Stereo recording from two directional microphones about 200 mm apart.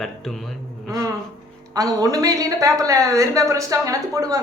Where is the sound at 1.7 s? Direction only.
20° right (ahead or behind).